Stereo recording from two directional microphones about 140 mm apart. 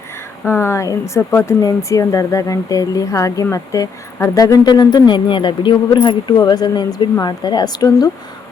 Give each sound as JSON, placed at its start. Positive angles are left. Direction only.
{"t": 0.4, "sound": "speech", "side_deg": 15}